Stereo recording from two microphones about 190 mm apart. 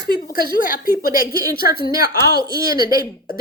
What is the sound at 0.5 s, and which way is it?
A woman's voice, 50° left (ahead or behind).